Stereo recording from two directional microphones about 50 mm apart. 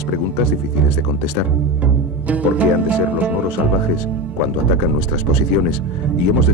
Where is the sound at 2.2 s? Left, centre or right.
Right.